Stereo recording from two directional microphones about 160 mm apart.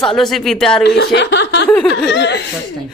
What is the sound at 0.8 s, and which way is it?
Speech, 90° left.